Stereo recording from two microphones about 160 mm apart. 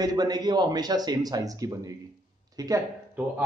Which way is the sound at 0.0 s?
25° right (ahead or behind).